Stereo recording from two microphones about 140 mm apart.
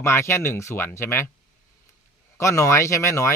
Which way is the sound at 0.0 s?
20° left (ahead or behind).